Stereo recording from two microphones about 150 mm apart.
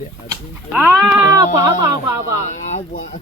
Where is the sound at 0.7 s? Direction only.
5° right (ahead or behind).